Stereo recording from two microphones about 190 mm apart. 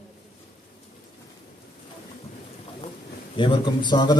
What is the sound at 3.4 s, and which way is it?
Speech, 25° left (ahead or behind).